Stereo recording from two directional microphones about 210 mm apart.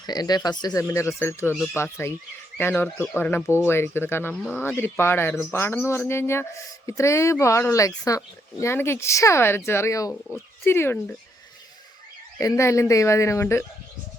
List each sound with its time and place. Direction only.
0.0 s speech: 20° left (ahead or behind)
12.4 s speech: 15° left (ahead or behind)